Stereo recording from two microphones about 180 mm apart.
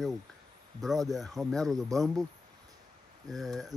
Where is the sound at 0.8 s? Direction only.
Centre (ahead or behind).